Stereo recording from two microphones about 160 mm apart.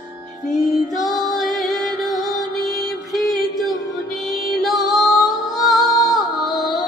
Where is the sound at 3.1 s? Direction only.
Centre (ahead or behind).